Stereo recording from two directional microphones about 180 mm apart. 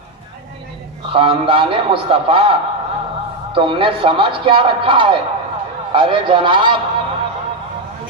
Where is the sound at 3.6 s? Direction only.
30° right (ahead or behind).